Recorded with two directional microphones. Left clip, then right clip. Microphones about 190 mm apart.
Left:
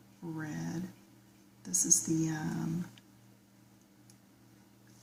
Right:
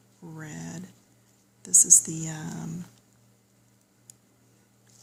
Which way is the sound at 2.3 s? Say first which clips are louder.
Left 1 dB; 50° right (ahead or behind).